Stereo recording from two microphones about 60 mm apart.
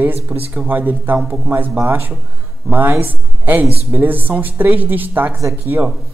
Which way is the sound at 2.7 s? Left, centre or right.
Right.